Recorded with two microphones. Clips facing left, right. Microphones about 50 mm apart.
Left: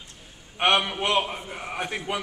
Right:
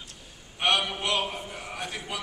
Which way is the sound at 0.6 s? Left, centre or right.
Left.